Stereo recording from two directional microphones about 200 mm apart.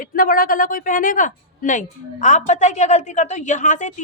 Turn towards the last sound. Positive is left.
turn(degrees=40)  # may be behind; listen again after turning